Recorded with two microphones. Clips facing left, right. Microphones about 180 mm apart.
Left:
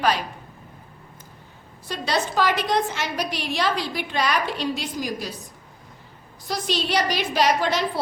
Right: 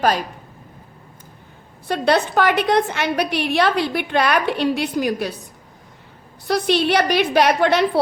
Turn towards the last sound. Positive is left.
turn(degrees=-60)  # may be behind; listen again after turning